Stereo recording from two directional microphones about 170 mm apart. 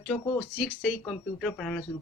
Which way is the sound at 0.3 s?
10° right (ahead or behind).